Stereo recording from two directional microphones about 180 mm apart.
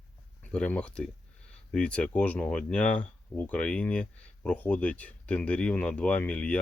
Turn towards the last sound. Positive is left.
turn(degrees=5)  # may be behind; listen again after turning